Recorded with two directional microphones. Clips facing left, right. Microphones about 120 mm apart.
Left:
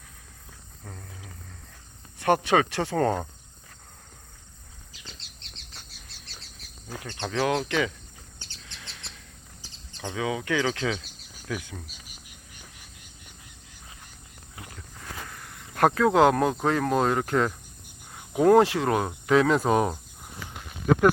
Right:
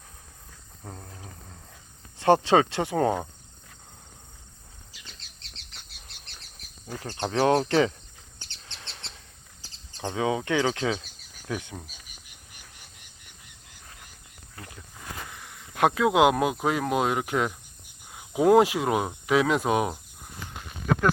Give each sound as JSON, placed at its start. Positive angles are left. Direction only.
{"t": 0.9, "sound": "speech", "side_deg": -25}
{"t": 2.1, "sound": "speech", "side_deg": -25}
{"t": 7.0, "sound": "speech", "side_deg": -35}
{"t": 8.6, "sound": "chirp", "side_deg": -30}
{"t": 10.0, "sound": "speech", "side_deg": -30}
{"t": 15.3, "sound": "speech", "side_deg": -5}